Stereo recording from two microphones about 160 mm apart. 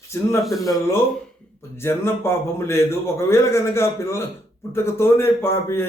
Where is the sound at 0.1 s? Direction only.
15° left (ahead or behind).